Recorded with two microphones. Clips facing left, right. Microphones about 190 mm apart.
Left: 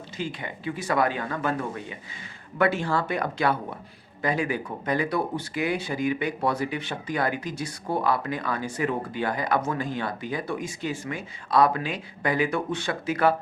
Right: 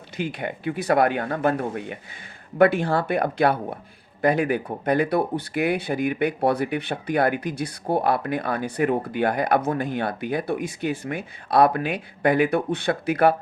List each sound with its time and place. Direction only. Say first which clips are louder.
0.2 s speech: right 5 dB; 60° right (ahead or behind)